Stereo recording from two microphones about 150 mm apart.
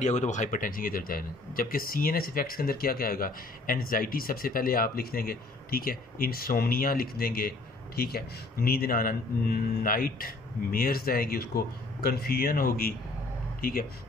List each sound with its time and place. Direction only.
0.0 s speech: 50° left (ahead or behind); by 13.8 s 80° left